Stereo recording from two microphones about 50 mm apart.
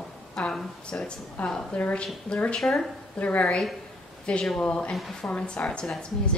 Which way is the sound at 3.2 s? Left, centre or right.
Left.